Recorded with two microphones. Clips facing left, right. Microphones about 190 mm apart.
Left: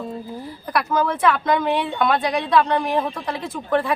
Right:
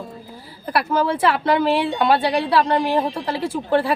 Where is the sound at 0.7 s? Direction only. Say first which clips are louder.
Right 2 dB; 30° right (ahead or behind).